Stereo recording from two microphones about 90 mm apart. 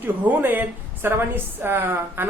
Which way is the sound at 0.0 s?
20° right (ahead or behind).